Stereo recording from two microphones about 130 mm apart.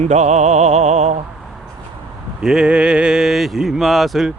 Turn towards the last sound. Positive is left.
turn(degrees=0)  # may be behind; listen again after turning